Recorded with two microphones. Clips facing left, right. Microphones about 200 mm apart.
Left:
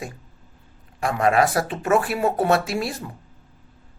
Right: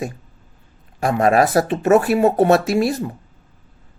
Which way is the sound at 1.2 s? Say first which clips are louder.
Right 4 dB; 45° right (ahead or behind).